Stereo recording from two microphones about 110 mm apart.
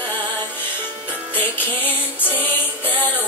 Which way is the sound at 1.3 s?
15° left (ahead or behind).